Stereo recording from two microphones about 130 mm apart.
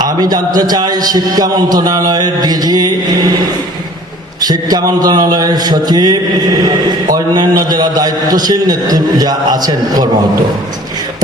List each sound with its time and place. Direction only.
0.0 s speech: 30° right (ahead or behind)
4.4 s speech: 30° right (ahead or behind)